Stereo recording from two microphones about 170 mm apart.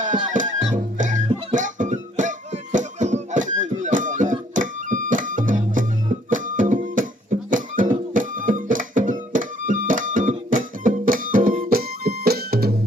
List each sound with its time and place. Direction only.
0.0 s music: 50° right (ahead or behind); by 12.7 s 65° right (ahead or behind)